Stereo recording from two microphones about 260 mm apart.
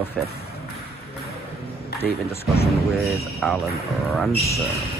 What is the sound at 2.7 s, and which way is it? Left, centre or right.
Speech, centre.